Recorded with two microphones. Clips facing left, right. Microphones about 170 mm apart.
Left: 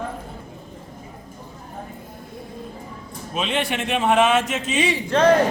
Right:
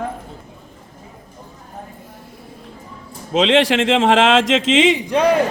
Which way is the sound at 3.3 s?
90° right.